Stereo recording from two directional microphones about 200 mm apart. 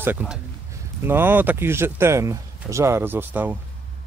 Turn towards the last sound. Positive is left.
turn(degrees=-10)  # may be behind; listen again after turning